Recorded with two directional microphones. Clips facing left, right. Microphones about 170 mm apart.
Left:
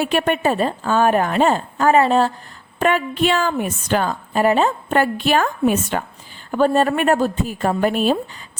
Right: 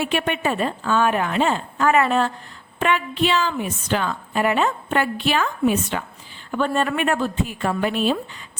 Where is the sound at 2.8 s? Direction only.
45° left (ahead or behind).